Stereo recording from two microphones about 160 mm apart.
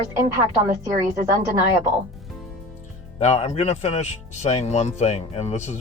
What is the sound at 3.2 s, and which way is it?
Speech, 45° left (ahead or behind).